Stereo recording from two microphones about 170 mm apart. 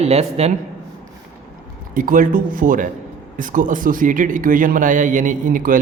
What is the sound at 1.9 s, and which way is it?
Speech, 55° right (ahead or behind).